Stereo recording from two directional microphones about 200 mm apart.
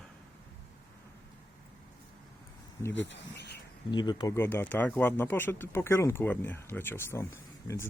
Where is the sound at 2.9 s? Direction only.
60° left (ahead or behind).